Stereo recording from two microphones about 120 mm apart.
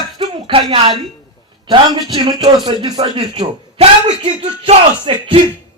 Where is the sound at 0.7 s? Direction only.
50° right (ahead or behind).